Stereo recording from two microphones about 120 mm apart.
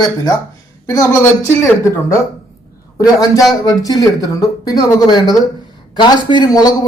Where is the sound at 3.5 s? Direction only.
30° left (ahead or behind).